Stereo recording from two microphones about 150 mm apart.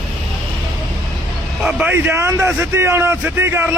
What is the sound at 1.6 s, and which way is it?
A man's voice, 5° right (ahead or behind).